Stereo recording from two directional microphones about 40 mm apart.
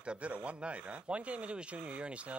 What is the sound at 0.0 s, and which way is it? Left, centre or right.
Speech, right.